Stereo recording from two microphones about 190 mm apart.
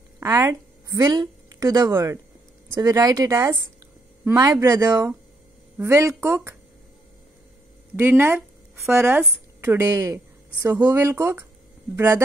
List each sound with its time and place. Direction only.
0.2 s a woman's voice: 15° right (ahead or behind)
7.9 s a woman's voice: 10° right (ahead or behind)